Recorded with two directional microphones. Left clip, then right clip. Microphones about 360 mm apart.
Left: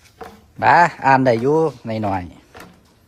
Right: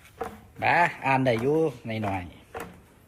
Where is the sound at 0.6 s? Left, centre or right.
Left.